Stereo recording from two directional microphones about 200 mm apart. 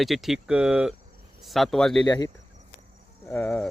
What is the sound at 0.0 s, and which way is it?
Speech, centre (ahead or behind).